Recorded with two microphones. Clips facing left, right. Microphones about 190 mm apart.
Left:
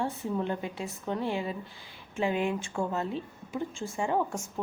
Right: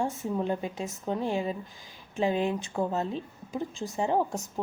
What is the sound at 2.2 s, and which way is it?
Speech, 35° right (ahead or behind).